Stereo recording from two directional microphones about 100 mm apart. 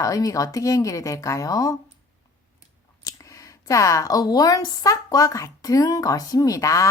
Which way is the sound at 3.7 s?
35° left (ahead or behind).